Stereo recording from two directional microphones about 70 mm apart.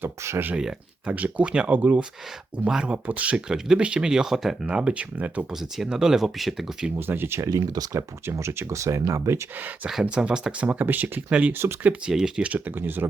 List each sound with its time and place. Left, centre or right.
0.0 s speech: right
0.5 s speech: centre
1.0 s speech: right
5.5 s speech: centre
6.9 s speech: right
7.5 s speech: right
7.9 s speech: right
9.6 s speech: right
9.9 s speech: centre
11.5 s speech: right
12.0 s speech: centre
12.5 s speech: right